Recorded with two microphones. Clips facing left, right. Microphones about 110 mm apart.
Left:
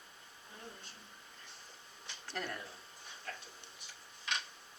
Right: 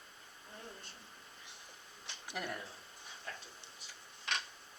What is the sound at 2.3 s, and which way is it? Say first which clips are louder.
Speech: even; 15° right (ahead or behind).